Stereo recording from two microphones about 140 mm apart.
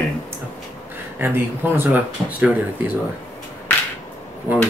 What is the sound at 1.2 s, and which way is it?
Speech, 15° right (ahead or behind).